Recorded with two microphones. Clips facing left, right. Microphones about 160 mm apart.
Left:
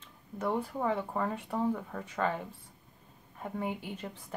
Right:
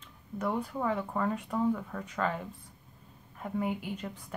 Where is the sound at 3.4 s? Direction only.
30° left (ahead or behind).